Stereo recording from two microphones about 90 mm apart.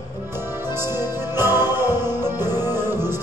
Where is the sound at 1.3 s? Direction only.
25° right (ahead or behind).